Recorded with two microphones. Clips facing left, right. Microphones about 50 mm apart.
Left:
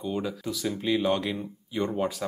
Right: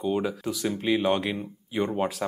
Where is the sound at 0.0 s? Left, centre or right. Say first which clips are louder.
Right 4 dB; right.